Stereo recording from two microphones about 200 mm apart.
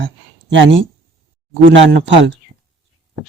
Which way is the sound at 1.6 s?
65° right (ahead or behind).